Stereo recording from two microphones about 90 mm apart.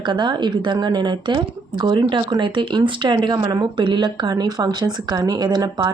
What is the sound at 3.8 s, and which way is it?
A woman's voice, 60° right (ahead or behind).